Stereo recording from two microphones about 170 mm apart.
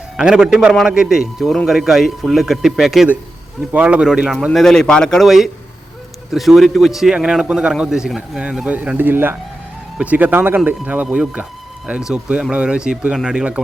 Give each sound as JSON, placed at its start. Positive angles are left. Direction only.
{"t": 0.2, "sound": "a man's voice", "side_deg": -5}